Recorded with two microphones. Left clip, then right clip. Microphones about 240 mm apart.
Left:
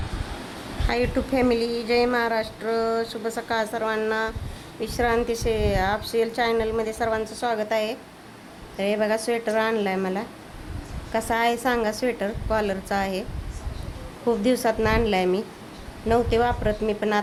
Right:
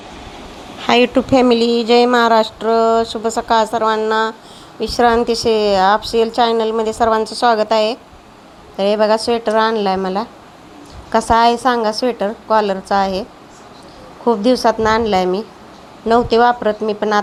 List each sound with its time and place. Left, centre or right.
0.9 s speech: right
14.3 s speech: centre